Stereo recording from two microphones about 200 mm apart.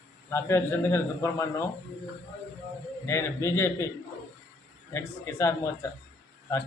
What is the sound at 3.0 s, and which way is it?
Speech, 15° left (ahead or behind).